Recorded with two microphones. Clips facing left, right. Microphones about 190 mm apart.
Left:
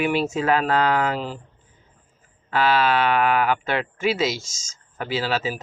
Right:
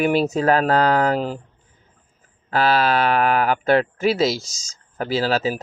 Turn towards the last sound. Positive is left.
turn(degrees=-40)  # may be behind; listen again after turning